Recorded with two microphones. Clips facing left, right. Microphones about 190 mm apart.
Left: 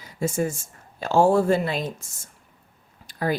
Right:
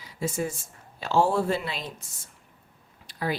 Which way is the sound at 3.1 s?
45° left (ahead or behind).